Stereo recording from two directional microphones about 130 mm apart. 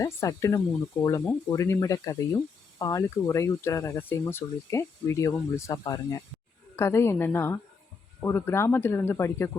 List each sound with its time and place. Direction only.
0.0 s speech: 25° left (ahead or behind)